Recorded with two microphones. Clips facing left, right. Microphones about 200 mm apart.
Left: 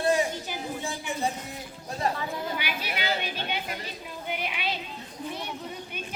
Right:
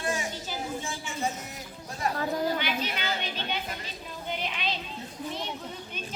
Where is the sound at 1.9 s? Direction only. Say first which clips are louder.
Left 3 dB; 30° left (ahead or behind).